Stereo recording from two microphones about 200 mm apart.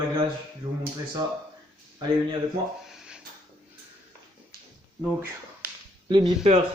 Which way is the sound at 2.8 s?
5° right (ahead or behind).